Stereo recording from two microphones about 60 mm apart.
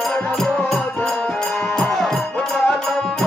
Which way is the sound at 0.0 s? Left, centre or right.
Centre.